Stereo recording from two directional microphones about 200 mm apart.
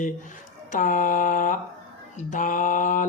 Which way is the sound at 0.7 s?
40° left (ahead or behind).